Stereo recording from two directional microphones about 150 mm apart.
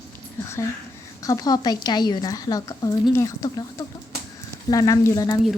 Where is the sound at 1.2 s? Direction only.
25° left (ahead or behind).